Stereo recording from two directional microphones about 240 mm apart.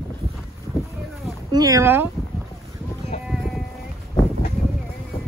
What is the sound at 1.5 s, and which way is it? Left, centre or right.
Speech, centre.